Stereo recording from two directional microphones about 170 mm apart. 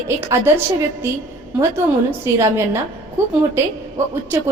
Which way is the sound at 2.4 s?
15° right (ahead or behind).